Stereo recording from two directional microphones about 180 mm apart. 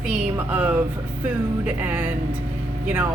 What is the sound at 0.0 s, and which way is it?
A woman's voice, 5° right (ahead or behind).